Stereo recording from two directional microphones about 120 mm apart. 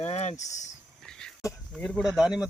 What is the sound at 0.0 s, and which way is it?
Speech, 70° left (ahead or behind).